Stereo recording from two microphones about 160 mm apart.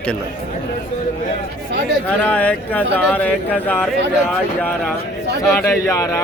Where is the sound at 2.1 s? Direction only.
10° left (ahead or behind).